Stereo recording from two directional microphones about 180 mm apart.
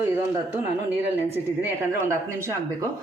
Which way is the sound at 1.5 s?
15° right (ahead or behind).